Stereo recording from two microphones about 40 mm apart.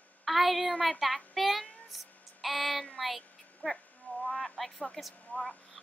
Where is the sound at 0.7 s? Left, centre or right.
Centre.